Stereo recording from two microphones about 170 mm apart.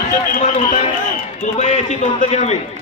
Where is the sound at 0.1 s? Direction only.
45° left (ahead or behind).